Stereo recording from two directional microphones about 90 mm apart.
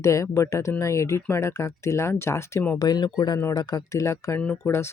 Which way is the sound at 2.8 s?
50° left (ahead or behind).